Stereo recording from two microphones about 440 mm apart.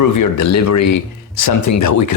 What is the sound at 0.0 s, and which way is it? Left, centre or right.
Speech, left.